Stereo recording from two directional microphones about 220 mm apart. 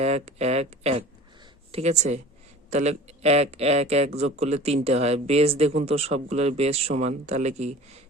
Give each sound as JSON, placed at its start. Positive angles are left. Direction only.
{"t": 0.0, "sound": "a man's voice", "side_deg": -30}